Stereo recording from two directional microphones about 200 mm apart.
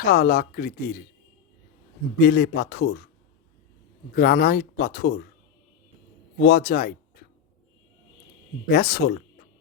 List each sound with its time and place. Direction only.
0.0 s speech: 50° left (ahead or behind)
2.2 s speech: 55° left (ahead or behind)
4.1 s speech: 50° left (ahead or behind)
6.4 s speech: 45° left (ahead or behind)
8.7 s speech: 50° left (ahead or behind)